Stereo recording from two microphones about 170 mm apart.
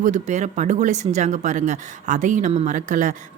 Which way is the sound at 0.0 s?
45° right (ahead or behind).